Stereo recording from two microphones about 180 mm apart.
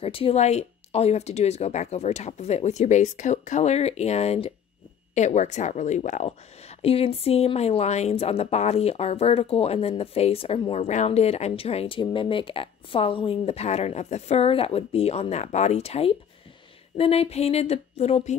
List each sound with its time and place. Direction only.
0.0 s speech: 30° left (ahead or behind)